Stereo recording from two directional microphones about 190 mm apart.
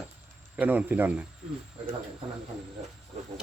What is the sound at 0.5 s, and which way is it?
Speech, 10° right (ahead or behind).